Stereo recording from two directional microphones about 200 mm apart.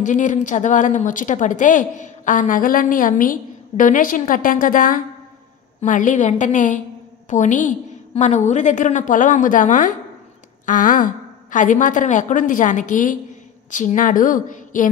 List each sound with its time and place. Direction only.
0.0 s a woman's voice: 40° left (ahead or behind)